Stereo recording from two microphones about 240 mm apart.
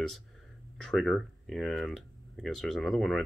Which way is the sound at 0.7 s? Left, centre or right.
Centre.